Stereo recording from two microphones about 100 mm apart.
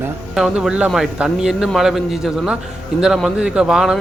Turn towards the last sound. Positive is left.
turn(degrees=-5)  # may be behind; listen again after turning